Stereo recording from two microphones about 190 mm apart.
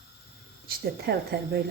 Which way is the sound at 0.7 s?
55° right (ahead or behind).